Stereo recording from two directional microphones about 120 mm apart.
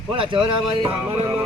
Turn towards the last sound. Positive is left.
turn(degrees=-45)  # may be behind; listen again after turning